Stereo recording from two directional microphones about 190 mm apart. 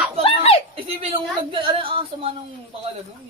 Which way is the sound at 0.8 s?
30° right (ahead or behind).